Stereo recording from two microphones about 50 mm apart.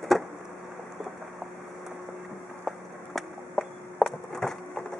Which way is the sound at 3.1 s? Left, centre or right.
Centre.